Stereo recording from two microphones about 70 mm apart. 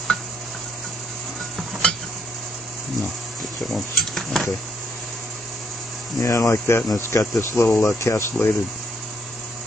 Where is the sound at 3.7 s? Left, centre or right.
Centre.